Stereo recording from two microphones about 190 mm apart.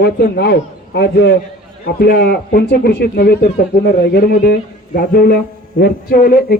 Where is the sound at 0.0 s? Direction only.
55° left (ahead or behind).